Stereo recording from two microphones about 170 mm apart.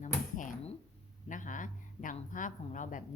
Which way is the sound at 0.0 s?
50° left (ahead or behind).